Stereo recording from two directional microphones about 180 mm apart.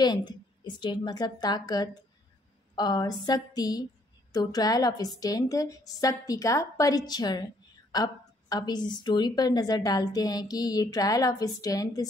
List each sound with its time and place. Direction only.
0.0 s a woman's voice: 25° left (ahead or behind)